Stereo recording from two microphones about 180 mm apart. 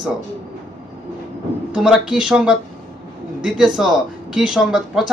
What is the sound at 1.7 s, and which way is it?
Speech, centre (ahead or behind).